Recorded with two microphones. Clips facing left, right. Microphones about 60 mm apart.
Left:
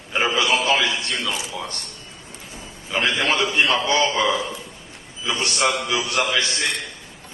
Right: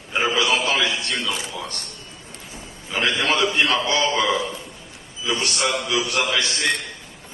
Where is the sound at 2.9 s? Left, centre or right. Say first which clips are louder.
Even; left.